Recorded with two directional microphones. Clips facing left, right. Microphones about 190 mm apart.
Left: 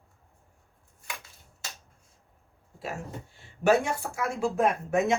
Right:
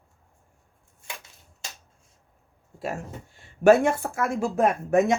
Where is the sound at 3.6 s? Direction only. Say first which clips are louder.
Right 6 dB; 55° right (ahead or behind).